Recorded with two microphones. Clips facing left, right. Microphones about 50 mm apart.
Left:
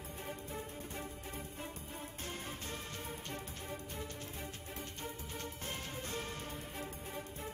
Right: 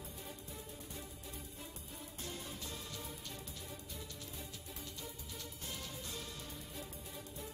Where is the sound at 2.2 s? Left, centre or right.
Left.